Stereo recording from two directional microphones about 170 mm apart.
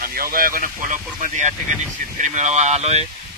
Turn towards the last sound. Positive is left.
turn(degrees=-40)  # may be behind; listen again after turning